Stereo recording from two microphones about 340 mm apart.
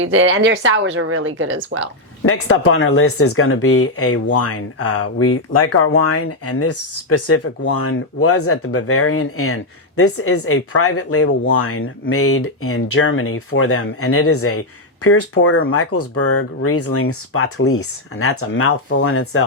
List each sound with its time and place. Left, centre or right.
0.0 s speech: right
2.2 s speech: left